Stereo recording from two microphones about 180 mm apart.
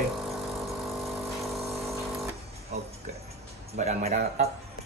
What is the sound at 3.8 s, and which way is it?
Speech, 40° right (ahead or behind).